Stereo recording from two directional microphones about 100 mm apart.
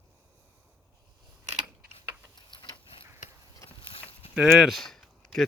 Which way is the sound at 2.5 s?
55° left (ahead or behind).